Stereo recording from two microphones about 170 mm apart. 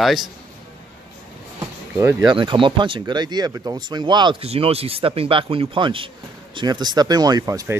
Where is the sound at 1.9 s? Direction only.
15° right (ahead or behind).